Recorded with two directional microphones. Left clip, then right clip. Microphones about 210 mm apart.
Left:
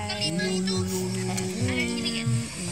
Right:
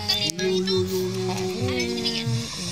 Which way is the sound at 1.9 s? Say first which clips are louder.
Right 3 dB; 50° right (ahead or behind).